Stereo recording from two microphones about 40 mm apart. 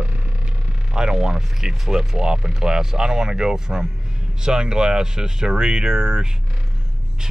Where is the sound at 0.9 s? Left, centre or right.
Centre.